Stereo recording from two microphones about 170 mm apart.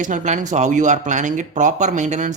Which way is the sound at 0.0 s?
50° right (ahead or behind).